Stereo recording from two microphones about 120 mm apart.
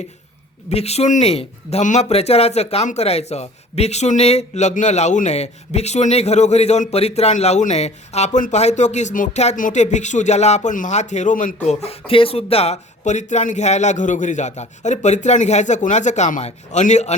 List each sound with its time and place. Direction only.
0.7 s speech: 60° left (ahead or behind)